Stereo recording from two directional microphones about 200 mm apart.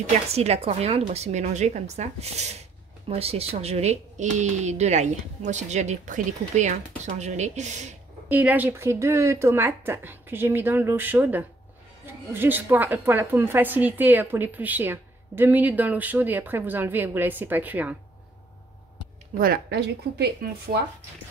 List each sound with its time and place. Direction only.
0.3 s speech: 30° right (ahead or behind)
8.3 s a woman's voice: 10° right (ahead or behind)
19.3 s speech: 45° right (ahead or behind)